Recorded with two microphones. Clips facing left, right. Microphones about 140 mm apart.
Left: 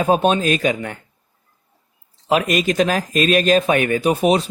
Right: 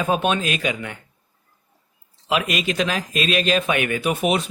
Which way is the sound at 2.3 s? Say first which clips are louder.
Left 5 dB; 40° left (ahead or behind).